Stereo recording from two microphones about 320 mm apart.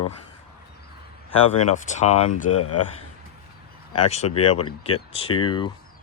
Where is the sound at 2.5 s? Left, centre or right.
Left.